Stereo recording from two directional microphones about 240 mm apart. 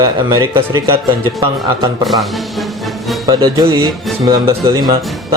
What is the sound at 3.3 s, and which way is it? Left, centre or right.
A man's voice, centre.